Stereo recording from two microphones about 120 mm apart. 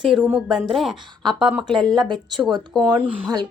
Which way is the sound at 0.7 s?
Centre (ahead or behind).